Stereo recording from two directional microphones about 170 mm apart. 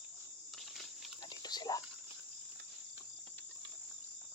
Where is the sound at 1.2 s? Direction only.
25° left (ahead or behind).